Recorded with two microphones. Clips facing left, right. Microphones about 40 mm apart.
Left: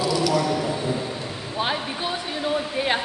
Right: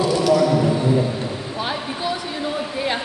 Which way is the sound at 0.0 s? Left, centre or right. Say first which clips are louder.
Right 3 dB; right.